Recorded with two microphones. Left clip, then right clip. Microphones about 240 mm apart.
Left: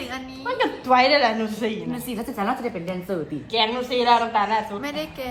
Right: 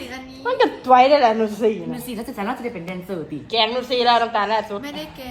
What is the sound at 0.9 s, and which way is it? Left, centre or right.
Speech, left.